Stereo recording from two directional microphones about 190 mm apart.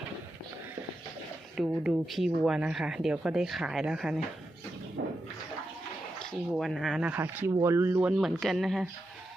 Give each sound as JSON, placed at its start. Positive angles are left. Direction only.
{"t": 1.5, "sound": "speech", "side_deg": 0}
{"t": 5.0, "sound": "toilet flush", "side_deg": -55}
{"t": 6.1, "sound": "speech", "side_deg": 0}